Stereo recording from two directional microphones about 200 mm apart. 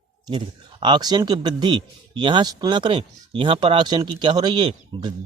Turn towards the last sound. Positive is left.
turn(degrees=-25)  # may be behind; listen again after turning